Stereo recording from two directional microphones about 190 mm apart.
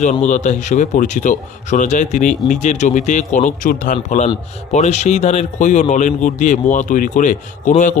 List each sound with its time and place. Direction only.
0.0 s a man's voice: 40° left (ahead or behind)